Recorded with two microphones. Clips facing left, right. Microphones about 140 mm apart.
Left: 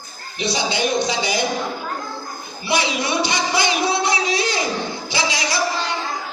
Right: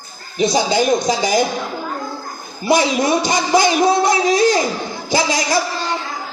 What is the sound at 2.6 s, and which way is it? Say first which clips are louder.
A woman's voice: right 7 dB; 45° right (ahead or behind).